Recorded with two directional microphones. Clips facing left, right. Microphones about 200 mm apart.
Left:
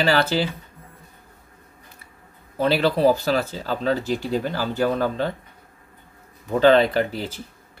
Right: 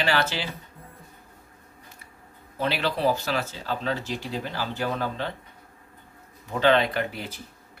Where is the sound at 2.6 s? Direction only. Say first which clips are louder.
Left 7 dB; 40° left (ahead or behind).